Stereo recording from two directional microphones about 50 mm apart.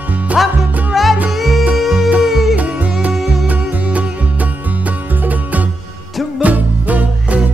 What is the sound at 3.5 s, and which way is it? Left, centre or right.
Music, right.